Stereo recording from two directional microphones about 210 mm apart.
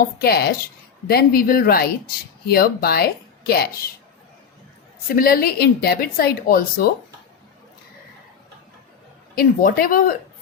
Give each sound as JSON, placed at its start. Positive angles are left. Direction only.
{"t": 0.2, "sound": "a woman's voice", "side_deg": 50}
{"t": 5.1, "sound": "a woman's voice", "side_deg": 45}
{"t": 9.3, "sound": "a woman's voice", "side_deg": 45}